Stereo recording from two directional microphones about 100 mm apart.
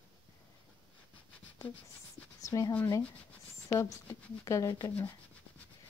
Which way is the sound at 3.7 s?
30° left (ahead or behind).